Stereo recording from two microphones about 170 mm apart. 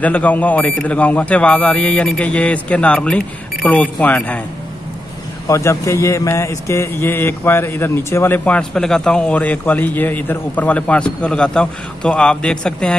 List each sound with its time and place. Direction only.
0.0 s speech: 10° left (ahead or behind)
5.5 s speech: 15° left (ahead or behind)